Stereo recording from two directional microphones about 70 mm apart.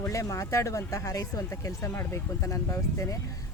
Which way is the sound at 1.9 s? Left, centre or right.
Left.